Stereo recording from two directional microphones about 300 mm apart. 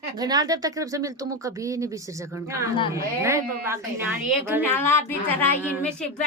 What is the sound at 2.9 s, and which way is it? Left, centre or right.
A woman's voice, centre.